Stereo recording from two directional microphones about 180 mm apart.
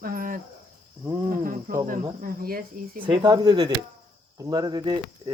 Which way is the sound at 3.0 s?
25° right (ahead or behind).